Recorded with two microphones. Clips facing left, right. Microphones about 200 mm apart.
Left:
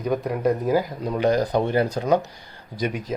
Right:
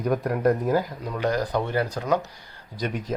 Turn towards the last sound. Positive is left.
turn(degrees=10)  # may be behind; listen again after turning